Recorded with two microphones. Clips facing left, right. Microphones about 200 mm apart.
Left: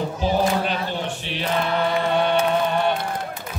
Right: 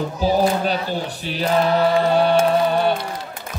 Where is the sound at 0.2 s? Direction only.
35° right (ahead or behind).